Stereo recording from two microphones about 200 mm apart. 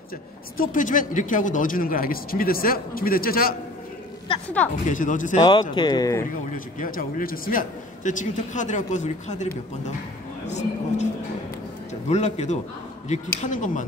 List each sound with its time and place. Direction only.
0.6 s speech: 40° left (ahead or behind)
4.8 s a man's voice: 40° left (ahead or behind)
5.4 s speech: 20° left (ahead or behind)
6.5 s a man's voice: 45° left (ahead or behind)